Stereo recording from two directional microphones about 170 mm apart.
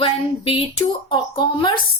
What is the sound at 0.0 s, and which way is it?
Speech, 35° left (ahead or behind).